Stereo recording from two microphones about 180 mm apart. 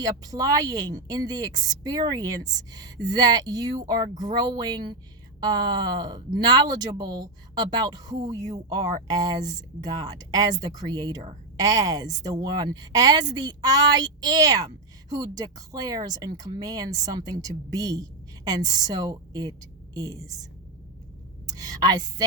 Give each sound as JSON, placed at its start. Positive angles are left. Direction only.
{"t": 0.0, "sound": "a woman's voice", "side_deg": -20}
{"t": 21.5, "sound": "a woman's voice", "side_deg": -20}